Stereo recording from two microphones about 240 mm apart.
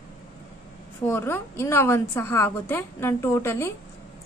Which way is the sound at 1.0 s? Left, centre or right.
Centre.